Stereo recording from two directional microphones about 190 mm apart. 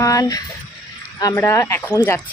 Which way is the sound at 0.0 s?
15° left (ahead or behind).